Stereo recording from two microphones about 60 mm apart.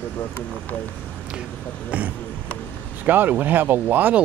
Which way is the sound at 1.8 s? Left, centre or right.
Right.